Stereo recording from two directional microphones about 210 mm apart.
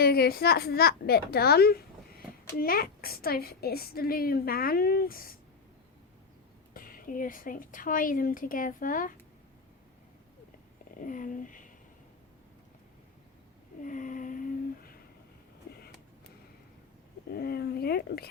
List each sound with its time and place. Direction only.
0.0 s a woman's voice: 50° left (ahead or behind)
6.7 s a woman's voice: 40° left (ahead or behind)
11.0 s speech: 40° left (ahead or behind)
13.8 s a sound: 40° left (ahead or behind)
15.7 s vehicle: 50° left (ahead or behind)
17.3 s a woman's voice: 50° left (ahead or behind)